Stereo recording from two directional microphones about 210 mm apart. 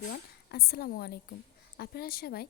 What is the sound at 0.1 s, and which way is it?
A woman's voice, 50° left (ahead or behind).